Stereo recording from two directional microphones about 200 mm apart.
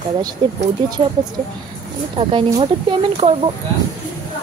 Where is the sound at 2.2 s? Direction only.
25° right (ahead or behind).